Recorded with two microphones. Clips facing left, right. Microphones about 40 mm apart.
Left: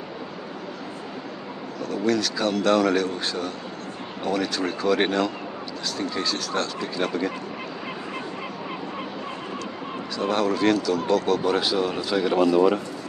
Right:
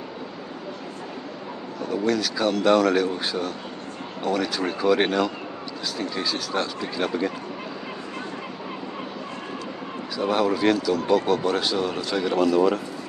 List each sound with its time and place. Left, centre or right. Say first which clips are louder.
1.9 s speech: even; centre
10.1 s speech: right 1 dB; centre